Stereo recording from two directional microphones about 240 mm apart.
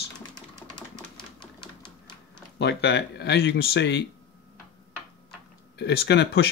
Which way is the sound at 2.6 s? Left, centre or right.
Left.